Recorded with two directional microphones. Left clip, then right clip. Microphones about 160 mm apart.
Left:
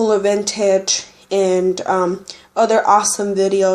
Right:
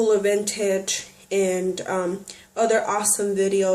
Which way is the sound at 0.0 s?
35° left (ahead or behind).